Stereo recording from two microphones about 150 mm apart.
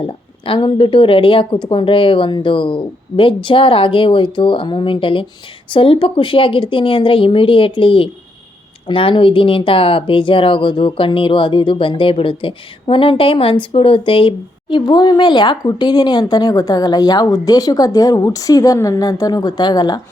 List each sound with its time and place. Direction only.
0.0 s speech: 35° left (ahead or behind)